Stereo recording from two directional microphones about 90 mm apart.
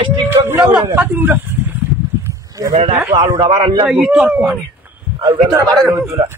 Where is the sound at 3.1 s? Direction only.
35° right (ahead or behind).